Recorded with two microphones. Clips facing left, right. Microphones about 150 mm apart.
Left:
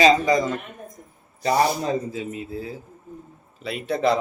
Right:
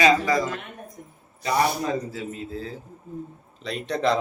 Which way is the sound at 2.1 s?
20° left (ahead or behind).